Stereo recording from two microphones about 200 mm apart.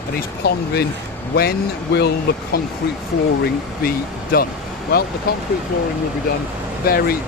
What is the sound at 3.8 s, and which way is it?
Speech, 50° left (ahead or behind).